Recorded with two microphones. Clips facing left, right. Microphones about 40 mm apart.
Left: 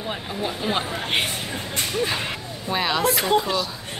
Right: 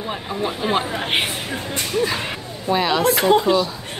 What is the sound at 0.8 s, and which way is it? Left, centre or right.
Speech, right.